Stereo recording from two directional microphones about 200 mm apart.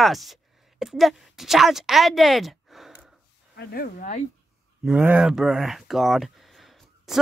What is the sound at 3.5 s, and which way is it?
Speech, 50° left (ahead or behind).